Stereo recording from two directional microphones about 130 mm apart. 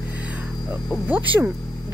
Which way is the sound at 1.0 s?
10° right (ahead or behind).